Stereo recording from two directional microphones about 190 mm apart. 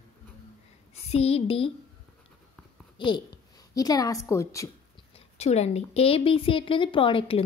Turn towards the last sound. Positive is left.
turn(degrees=25)  # may be behind; listen again after turning